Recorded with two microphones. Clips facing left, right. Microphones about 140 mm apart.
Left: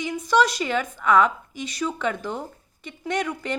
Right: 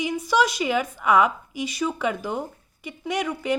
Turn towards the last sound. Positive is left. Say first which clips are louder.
# even
turn(degrees=-5)  # may be behind; listen again after turning